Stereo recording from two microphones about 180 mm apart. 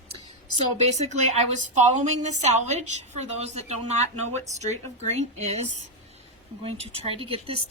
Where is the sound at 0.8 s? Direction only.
40° right (ahead or behind).